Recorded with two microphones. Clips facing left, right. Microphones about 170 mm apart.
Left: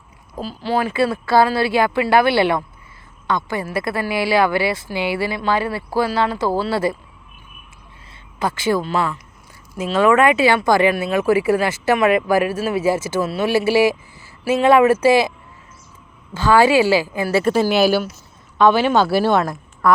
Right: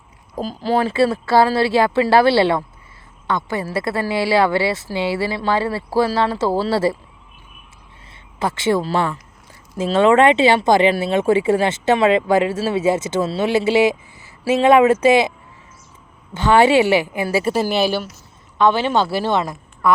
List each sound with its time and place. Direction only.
0.3 s speech: 40° right (ahead or behind)
8.4 s speech: 25° right (ahead or behind)
16.3 s speech: 20° right (ahead or behind); by 18.1 s centre (ahead or behind)
18.5 s speech: 20° right (ahead or behind)